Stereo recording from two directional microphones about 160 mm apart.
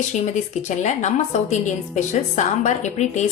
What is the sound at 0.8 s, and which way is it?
Speech, 50° left (ahead or behind).